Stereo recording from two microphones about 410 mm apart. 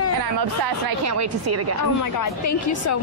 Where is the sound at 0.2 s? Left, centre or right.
Right.